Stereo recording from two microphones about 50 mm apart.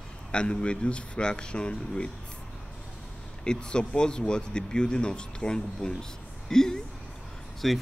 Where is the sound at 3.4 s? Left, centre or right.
Centre.